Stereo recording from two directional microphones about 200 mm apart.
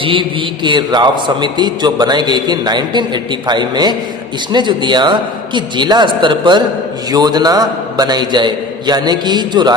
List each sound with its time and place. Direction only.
0.0 s a man's voice: 25° right (ahead or behind)